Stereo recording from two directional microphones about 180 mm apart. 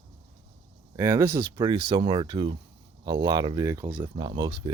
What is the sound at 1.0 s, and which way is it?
Speech, 15° right (ahead or behind).